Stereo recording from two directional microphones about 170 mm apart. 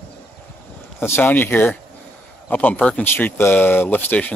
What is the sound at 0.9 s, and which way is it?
Speech, 15° left (ahead or behind).